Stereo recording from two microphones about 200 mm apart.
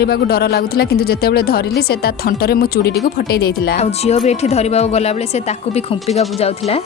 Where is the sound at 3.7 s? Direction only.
35° left (ahead or behind).